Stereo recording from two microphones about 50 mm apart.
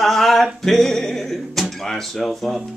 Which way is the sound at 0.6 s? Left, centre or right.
Centre.